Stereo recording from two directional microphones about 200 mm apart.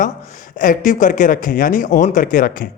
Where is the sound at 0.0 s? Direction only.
40° left (ahead or behind).